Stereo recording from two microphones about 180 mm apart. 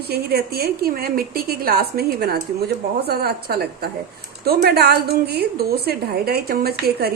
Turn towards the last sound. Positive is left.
turn(degrees=-60)  # may be behind; listen again after turning